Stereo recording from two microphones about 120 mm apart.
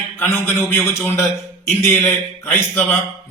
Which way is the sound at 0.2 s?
15° left (ahead or behind).